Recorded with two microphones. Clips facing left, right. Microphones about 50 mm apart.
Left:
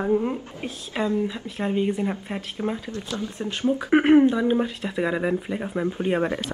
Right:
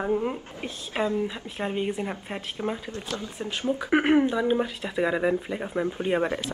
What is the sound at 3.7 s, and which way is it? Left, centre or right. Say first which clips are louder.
Speech: left 4 dB; centre.